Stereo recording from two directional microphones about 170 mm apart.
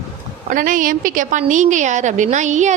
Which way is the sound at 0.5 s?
50° right (ahead or behind).